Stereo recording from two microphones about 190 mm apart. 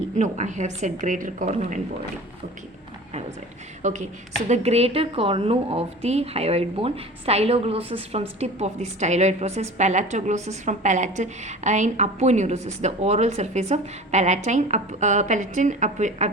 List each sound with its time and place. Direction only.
0.2 s a woman's voice: 40° right (ahead or behind)
3.8 s a woman's voice: 40° right (ahead or behind)